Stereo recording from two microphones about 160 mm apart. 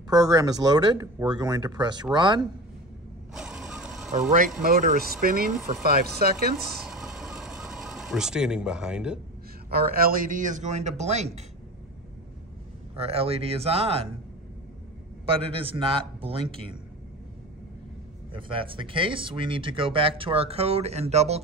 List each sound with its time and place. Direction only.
0.1 s speech: 25° right (ahead or behind)
3.3 s mechanisms: 5° right (ahead or behind)
4.6 s speech: 60° right (ahead or behind); by 6.3 s 75° right (ahead or behind)
6.6 s mechanisms: centre (ahead or behind)
9.7 s a man's voice: 70° right (ahead or behind); by 11.4 s 45° right (ahead or behind)
12.9 s speech: 40° right (ahead or behind)
15.2 s speech: 35° right (ahead or behind)
18.3 s speech: 30° right (ahead or behind)